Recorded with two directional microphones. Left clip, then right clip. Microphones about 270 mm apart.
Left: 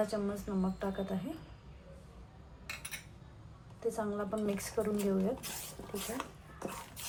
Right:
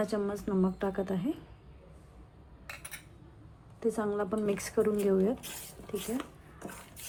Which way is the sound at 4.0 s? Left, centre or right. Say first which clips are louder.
Right 4 dB; right.